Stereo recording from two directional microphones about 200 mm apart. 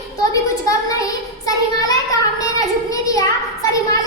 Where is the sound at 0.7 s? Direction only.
15° left (ahead or behind).